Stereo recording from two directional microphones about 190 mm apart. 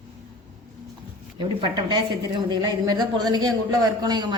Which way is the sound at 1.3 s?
25° right (ahead or behind).